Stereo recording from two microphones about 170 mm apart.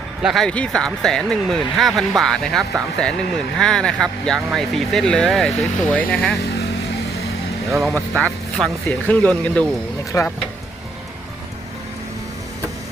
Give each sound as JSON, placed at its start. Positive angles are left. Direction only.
{"t": 0.2, "sound": "speech", "side_deg": 0}
{"t": 7.8, "sound": "speech", "side_deg": 5}